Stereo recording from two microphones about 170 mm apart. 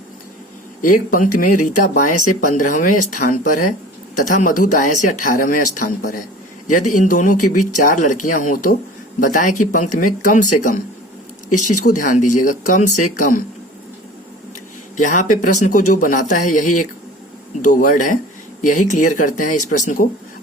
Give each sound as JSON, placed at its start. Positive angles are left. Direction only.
{"t": 0.8, "sound": "speech", "side_deg": 55}
{"t": 14.9, "sound": "speech", "side_deg": 45}